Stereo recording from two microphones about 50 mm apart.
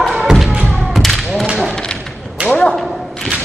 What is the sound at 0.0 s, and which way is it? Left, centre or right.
Thump, centre.